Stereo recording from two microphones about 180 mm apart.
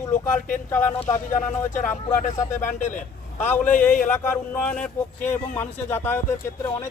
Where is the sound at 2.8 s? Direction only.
45° left (ahead or behind).